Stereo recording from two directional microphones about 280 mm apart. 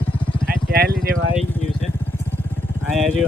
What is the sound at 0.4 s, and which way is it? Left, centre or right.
Vehicle, right.